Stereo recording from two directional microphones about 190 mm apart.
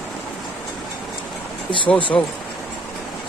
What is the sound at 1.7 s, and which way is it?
Speech, 25° left (ahead or behind).